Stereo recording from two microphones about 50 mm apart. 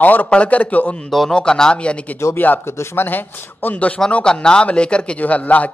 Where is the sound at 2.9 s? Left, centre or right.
Left.